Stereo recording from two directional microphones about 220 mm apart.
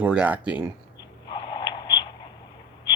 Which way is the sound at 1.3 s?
20° left (ahead or behind).